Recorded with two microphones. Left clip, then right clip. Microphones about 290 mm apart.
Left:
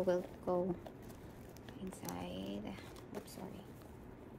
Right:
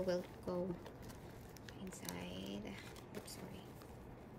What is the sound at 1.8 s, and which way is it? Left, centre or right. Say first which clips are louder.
Speech: left 4 dB; centre.